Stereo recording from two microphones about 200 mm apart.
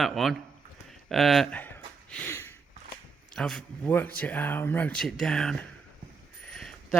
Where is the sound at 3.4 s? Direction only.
5° left (ahead or behind).